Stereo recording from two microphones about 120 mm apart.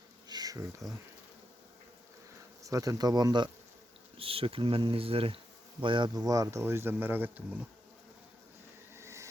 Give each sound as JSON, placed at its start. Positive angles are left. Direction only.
{"t": 0.3, "sound": "bee", "side_deg": -35}
{"t": 0.8, "sound": "bee", "side_deg": 0}
{"t": 2.6, "sound": "speech", "side_deg": -25}
{"t": 4.2, "sound": "speech", "side_deg": -50}
{"t": 9.0, "sound": "a sound", "side_deg": -25}